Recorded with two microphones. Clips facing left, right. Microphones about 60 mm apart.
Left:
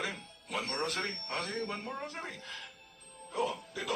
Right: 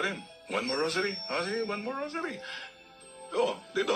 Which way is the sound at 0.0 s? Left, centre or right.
Right.